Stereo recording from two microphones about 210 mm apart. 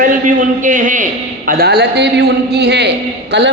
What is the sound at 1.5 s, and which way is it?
A man's voice, 50° right (ahead or behind).